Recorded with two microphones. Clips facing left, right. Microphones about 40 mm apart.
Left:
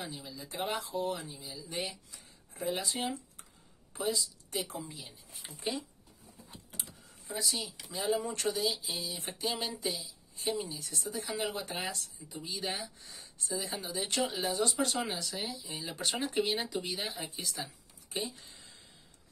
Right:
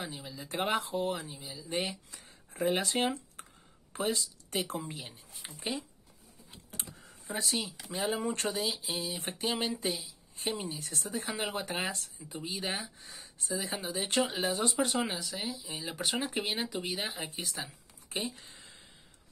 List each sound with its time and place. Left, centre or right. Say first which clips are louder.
0.0 s speech: right 1 dB; right
0.5 s speech: right 4 dB; right
1.7 s speech: right 5 dB; right
5.7 s speech: even; right
6.8 s computer keyboard: right 2 dB; right
7.8 s speech: left 2 dB; right
13.0 s speech: right 2 dB; centre
13.5 s speech: right 2 dB; right
13.8 s speech: right 3 dB; right; by 15.2 s centre
15.2 s speech: right 1 dB; centre
16.9 s speech: right 2 dB; right
18.1 s a sound: right 1 dB; right